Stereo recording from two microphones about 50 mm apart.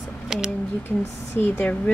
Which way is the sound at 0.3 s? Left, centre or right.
Centre.